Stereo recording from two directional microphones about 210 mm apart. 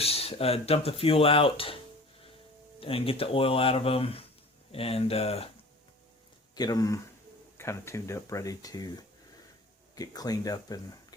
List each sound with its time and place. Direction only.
0.0 s speech: 30° left (ahead or behind)
2.8 s speech: 25° left (ahead or behind)
6.6 s speech: 20° left (ahead or behind)